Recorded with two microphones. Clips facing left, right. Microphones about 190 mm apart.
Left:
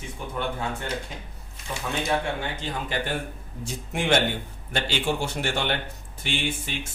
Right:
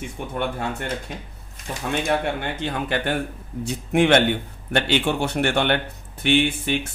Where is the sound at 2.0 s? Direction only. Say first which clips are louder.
Right 2 dB; 60° right (ahead or behind).